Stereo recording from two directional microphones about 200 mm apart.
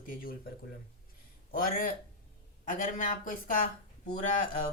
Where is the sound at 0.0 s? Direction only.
45° left (ahead or behind).